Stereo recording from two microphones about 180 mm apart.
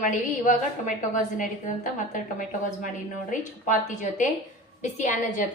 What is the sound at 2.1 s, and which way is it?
A woman's voice, 45° left (ahead or behind).